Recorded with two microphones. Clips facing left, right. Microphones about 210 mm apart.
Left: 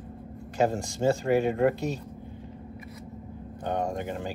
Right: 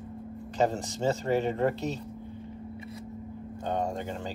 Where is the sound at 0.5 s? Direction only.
10° left (ahead or behind).